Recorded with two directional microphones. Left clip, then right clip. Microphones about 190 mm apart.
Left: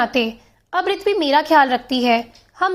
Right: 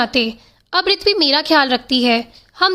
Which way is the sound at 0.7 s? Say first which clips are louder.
Right 3 dB; 35° right (ahead or behind).